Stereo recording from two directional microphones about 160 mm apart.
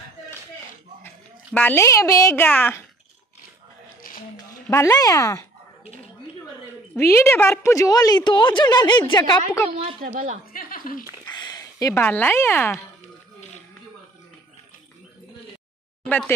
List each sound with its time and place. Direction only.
1.0 s a woman's voice: 10° left (ahead or behind)
4.6 s a woman's voice: 15° left (ahead or behind)
7.0 s a woman's voice: 15° left (ahead or behind)
9.7 s a woman's voice: 35° right (ahead or behind)
10.5 s a sound: 60° left (ahead or behind)
11.2 s a sound: 25° left (ahead or behind)
12.0 s speech: 10° left (ahead or behind)
16.1 s speech: 10° left (ahead or behind)